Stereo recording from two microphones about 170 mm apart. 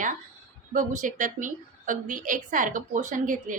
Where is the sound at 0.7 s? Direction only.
50° right (ahead or behind).